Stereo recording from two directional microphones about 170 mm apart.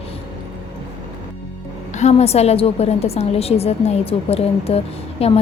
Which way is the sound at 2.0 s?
40° left (ahead or behind).